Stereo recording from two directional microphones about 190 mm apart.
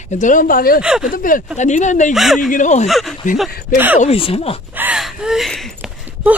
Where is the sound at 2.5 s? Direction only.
40° left (ahead or behind).